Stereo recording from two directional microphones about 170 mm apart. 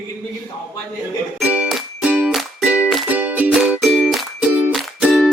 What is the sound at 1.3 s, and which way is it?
Music, 5° right (ahead or behind).